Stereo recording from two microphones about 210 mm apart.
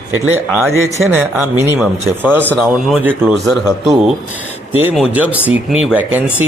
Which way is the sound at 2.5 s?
Centre (ahead or behind).